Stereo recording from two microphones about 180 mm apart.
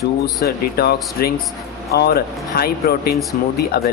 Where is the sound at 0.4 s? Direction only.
55° left (ahead or behind).